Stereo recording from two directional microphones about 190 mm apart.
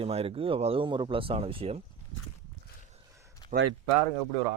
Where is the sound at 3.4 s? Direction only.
25° left (ahead or behind).